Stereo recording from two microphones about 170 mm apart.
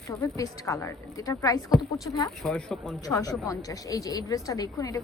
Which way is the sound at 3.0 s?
20° left (ahead or behind).